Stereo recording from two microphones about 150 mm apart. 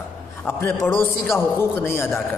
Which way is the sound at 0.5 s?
15° left (ahead or behind).